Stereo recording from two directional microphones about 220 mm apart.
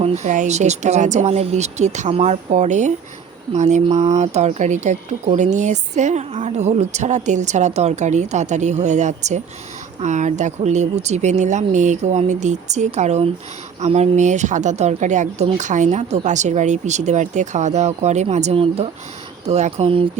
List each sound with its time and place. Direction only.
0.0 s speech: 30° right (ahead or behind)